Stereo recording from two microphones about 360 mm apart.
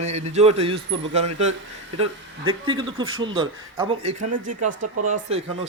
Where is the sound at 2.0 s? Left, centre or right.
Centre.